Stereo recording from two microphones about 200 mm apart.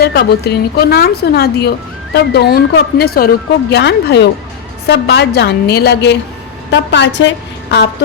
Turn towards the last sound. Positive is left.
turn(degrees=60)  # may be behind; listen again after turning